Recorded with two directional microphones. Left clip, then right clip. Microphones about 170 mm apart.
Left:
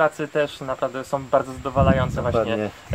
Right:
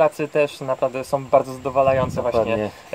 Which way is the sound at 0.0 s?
15° right (ahead or behind).